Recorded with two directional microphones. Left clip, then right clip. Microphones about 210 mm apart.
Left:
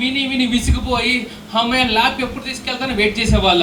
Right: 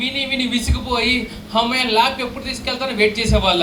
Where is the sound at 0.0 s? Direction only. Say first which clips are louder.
Left 2 dB; 25° right (ahead or behind).